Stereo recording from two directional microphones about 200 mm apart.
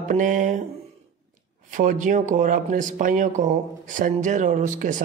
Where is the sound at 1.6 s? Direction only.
40° right (ahead or behind).